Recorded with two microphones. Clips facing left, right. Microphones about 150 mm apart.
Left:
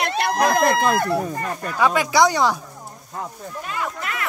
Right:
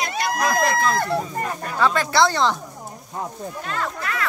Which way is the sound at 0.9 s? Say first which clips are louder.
Left 2 dB; 10° left (ahead or behind).